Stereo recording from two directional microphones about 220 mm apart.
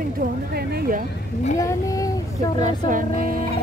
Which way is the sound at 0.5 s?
45° right (ahead or behind).